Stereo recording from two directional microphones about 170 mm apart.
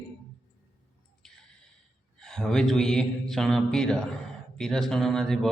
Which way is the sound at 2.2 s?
Centre (ahead or behind).